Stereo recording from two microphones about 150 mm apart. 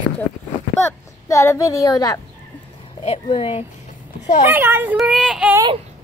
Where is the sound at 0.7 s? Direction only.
20° left (ahead or behind).